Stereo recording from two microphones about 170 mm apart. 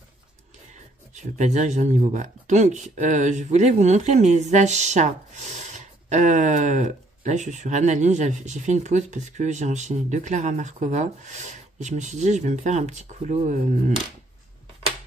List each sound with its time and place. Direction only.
1.1 s speech: 45° right (ahead or behind)